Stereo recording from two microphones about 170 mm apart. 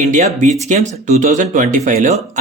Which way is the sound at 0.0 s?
45° right (ahead or behind).